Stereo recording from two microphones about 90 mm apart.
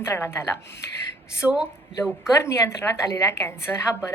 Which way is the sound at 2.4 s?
30° left (ahead or behind).